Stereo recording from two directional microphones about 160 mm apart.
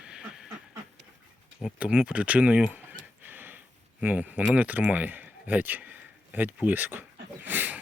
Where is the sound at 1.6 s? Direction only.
5° right (ahead or behind).